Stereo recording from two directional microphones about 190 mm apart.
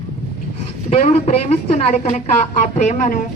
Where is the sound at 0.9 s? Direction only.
35° left (ahead or behind).